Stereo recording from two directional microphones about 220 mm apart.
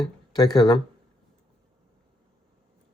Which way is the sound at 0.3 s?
20° left (ahead or behind).